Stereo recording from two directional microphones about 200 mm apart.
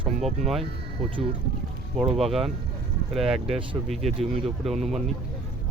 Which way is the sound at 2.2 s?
Centre (ahead or behind).